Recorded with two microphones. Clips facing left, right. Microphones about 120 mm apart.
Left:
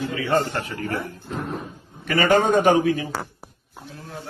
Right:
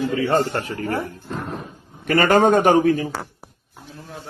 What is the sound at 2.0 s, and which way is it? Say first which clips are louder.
Speech: right 3 dB; 50° right (ahead or behind).